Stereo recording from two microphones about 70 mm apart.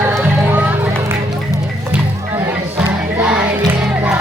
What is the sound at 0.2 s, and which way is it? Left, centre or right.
Music, right.